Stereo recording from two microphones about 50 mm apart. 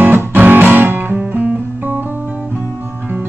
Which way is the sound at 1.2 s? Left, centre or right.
Right.